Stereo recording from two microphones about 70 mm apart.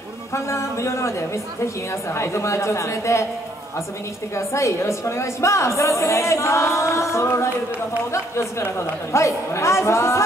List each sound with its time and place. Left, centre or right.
0.3 s a woman's voice: left
4.4 s a woman's voice: left